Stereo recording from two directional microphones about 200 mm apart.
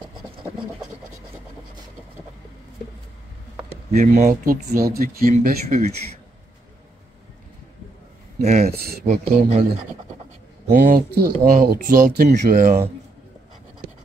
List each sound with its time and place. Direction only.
3.9 s speech: 40° right (ahead or behind)
8.4 s speech: 35° right (ahead or behind)
8.6 s speech: 50° right (ahead or behind)
9.0 s speech: 35° right (ahead or behind)
10.7 s speech: 45° right (ahead or behind)